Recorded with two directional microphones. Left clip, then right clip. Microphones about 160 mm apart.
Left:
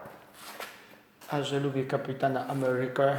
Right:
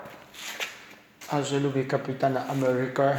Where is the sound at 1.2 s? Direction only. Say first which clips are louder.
Right 3 dB; 20° right (ahead or behind).